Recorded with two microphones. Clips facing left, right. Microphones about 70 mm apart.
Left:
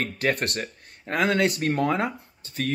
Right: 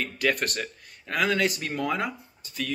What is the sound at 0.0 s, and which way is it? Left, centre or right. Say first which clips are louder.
Speech: left 1 dB; left.